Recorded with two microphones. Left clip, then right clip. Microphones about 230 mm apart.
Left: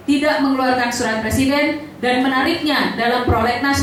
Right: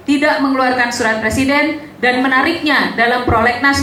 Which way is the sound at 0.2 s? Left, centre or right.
Centre.